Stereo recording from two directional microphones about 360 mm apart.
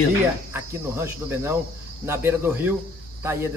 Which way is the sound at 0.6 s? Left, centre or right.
Centre.